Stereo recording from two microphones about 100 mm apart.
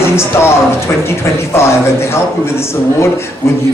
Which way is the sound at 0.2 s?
25° left (ahead or behind).